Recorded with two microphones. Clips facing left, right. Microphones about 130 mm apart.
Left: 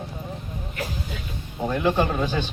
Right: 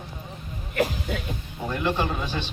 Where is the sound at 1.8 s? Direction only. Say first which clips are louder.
Left 4 dB; 45° left (ahead or behind).